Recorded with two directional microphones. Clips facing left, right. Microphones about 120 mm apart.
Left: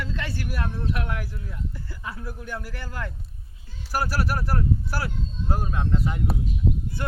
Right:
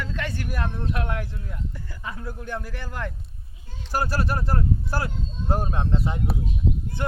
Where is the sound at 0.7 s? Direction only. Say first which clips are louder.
Right 1 dB; 20° right (ahead or behind).